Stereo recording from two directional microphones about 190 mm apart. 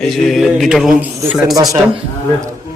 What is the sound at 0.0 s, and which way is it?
Speech, centre (ahead or behind).